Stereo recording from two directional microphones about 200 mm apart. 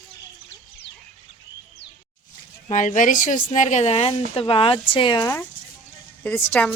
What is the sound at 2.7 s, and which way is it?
A woman's voice, 40° left (ahead or behind).